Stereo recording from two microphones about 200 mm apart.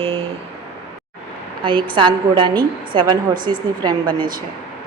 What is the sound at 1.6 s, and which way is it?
A woman's voice, 25° right (ahead or behind).